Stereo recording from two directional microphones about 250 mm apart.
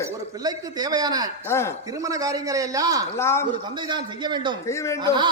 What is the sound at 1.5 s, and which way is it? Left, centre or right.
Speech, centre.